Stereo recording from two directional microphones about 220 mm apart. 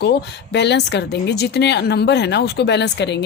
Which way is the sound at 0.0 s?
50° left (ahead or behind).